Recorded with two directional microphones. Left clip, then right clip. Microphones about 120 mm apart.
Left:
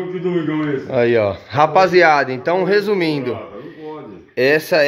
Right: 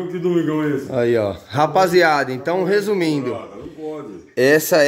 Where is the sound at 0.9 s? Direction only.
10° right (ahead or behind).